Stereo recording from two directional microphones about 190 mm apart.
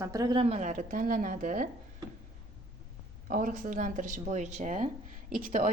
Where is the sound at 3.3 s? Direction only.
45° right (ahead or behind).